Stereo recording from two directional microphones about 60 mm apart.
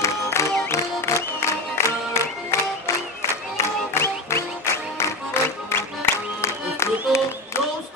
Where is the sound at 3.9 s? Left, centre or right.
Left.